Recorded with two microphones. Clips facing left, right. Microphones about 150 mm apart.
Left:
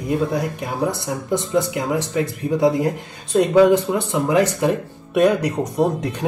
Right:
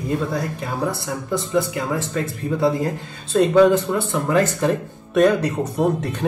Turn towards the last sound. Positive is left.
turn(degrees=15)  # may be behind; listen again after turning